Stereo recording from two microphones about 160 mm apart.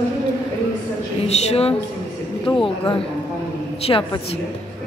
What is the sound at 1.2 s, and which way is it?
Speech, 40° left (ahead or behind).